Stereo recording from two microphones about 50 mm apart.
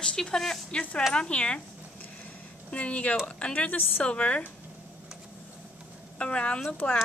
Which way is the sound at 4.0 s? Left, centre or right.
Left.